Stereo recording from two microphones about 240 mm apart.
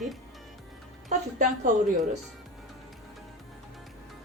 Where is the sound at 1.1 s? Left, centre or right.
Right.